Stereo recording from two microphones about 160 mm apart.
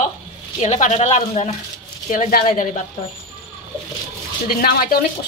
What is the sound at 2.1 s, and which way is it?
Speech, 55° left (ahead or behind).